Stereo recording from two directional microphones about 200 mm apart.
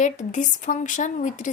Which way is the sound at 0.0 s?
40° left (ahead or behind).